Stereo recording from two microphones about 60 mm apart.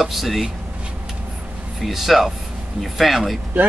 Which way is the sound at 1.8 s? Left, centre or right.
Centre.